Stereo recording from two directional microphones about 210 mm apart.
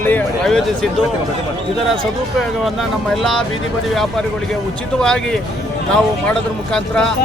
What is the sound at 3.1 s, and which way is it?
Speech, centre (ahead or behind).